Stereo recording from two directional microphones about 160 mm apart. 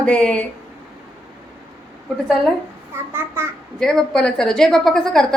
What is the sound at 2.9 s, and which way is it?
Speech, 15° right (ahead or behind).